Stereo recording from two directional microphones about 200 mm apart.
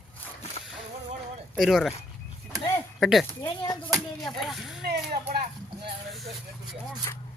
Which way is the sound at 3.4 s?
15° left (ahead or behind).